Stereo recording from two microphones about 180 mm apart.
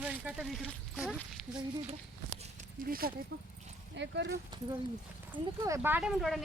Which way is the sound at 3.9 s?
75° right (ahead or behind).